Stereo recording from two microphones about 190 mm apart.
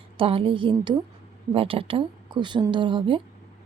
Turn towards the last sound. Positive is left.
turn(degrees=-25)  # may be behind; listen again after turning